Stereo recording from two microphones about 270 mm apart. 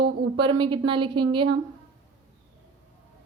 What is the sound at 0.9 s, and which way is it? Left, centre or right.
Speech, centre.